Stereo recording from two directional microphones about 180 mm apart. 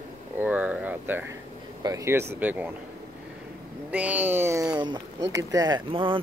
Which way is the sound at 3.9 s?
10° right (ahead or behind).